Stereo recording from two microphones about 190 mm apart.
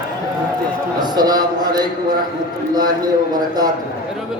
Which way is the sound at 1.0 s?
20° right (ahead or behind).